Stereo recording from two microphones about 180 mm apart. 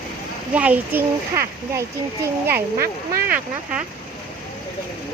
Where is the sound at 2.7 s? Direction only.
55° right (ahead or behind).